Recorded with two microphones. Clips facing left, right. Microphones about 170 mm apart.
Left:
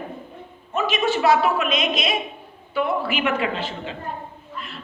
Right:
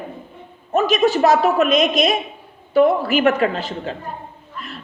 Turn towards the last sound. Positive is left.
turn(degrees=-45)  # may be behind; listen again after turning